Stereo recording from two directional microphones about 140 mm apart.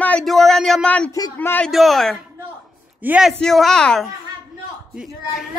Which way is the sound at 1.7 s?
Centre (ahead or behind).